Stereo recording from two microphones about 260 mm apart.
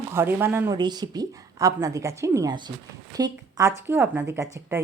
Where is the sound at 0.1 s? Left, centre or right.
Centre.